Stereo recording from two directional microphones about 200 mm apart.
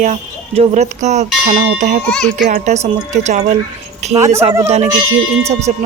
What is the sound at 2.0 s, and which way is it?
Speech, 5° left (ahead or behind).